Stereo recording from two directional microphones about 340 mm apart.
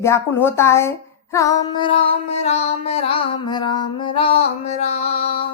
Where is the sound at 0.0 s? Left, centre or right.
Centre.